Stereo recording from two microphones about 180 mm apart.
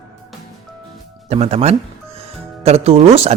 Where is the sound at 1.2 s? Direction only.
35° right (ahead or behind).